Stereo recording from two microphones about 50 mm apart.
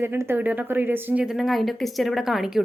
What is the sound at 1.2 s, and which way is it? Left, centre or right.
Speech, centre.